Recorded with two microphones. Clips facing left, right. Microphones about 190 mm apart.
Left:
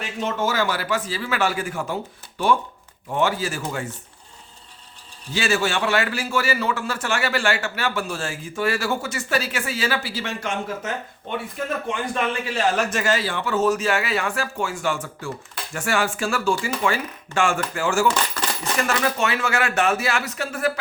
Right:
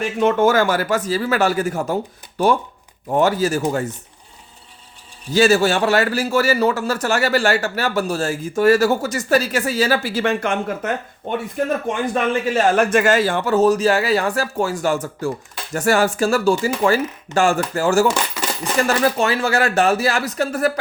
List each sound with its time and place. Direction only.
0.2 s a man's voice: 55° right (ahead or behind); by 3.9 s 40° right (ahead or behind)
5.3 s a man's voice: 40° right (ahead or behind); by 11.3 s 55° right (ahead or behind)
12.5 s a man's voice: 50° right (ahead or behind)